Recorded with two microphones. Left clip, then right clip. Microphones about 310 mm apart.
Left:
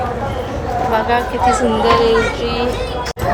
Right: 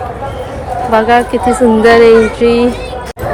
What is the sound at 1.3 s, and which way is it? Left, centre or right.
Music, centre.